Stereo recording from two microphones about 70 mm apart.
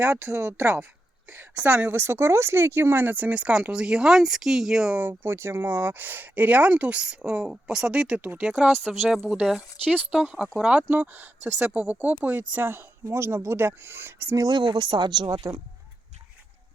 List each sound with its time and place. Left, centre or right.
0.0 s speech: right
1.5 s speech: right
4.9 s speech: right
14.3 s speech: right